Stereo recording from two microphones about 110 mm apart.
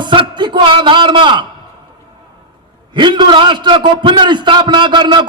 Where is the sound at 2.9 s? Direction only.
45° right (ahead or behind).